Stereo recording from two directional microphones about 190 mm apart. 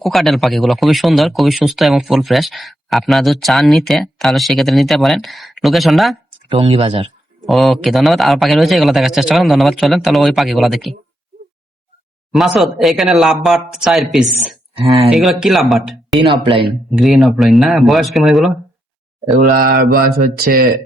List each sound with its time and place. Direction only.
0.0 s speech: centre (ahead or behind)
6.5 s speech: 30° right (ahead or behind)
7.4 s speech: centre (ahead or behind)
12.3 s speech: centre (ahead or behind)
16.1 s speech: 30° right (ahead or behind)
16.9 s speech: centre (ahead or behind)
19.5 s speech: 45° right (ahead or behind)